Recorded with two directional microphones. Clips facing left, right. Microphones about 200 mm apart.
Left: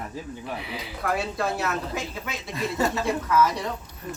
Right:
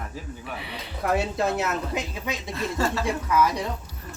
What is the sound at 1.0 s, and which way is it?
Speech, 20° right (ahead or behind).